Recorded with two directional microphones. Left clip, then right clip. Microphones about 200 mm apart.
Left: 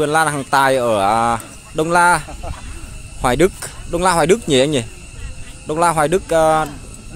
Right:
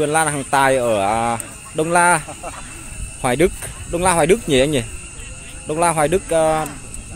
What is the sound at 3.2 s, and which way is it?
Speech, 10° left (ahead or behind).